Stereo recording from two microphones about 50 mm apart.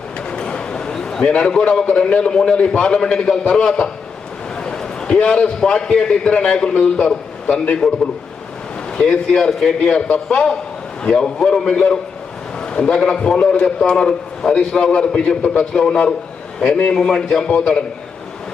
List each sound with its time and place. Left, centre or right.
0.3 s a sound: centre
1.9 s a man's voice: left
4.5 s a sound: centre
5.5 s a man's voice: centre
7.8 s a man's voice: centre
9.0 s a man's voice: centre